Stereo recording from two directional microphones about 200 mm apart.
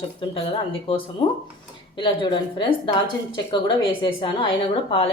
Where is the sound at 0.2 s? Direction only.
25° left (ahead or behind).